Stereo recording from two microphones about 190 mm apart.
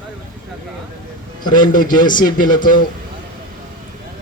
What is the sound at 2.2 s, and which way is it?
Speech, 45° left (ahead or behind).